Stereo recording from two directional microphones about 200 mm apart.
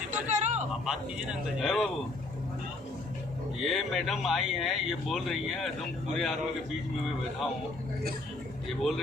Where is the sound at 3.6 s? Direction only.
Centre (ahead or behind).